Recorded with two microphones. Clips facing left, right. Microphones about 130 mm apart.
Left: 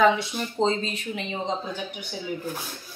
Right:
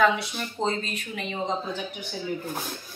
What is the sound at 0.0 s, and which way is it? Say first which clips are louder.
A woman's voice: left 2 dB; 20° left (ahead or behind).